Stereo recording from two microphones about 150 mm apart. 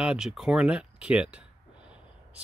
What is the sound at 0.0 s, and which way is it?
Speech, 5° right (ahead or behind).